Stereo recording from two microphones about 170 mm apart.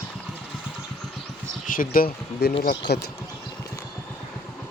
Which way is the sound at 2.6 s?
75° left (ahead or behind).